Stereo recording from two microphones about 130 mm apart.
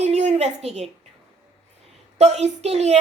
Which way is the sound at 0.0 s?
60° right (ahead or behind).